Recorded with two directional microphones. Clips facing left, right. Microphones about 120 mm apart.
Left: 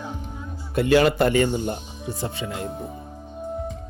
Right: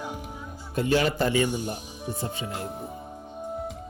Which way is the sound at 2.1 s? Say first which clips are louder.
Left 3 dB; 90° left.